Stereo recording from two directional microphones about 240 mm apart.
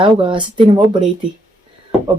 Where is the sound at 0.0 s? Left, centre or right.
Right.